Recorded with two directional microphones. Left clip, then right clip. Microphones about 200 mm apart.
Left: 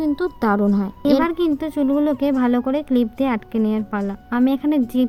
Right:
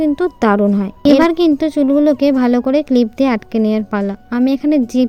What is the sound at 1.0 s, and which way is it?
A woman's voice, 55° right (ahead or behind).